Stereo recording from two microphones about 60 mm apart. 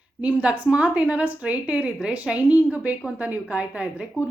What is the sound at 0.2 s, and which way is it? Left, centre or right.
A woman's voice, right.